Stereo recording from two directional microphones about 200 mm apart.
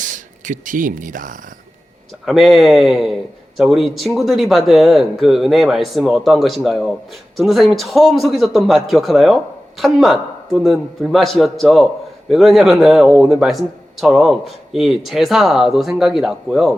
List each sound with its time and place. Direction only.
0.0 s speech: 40° right (ahead or behind)
2.2 s a man's voice: centre (ahead or behind)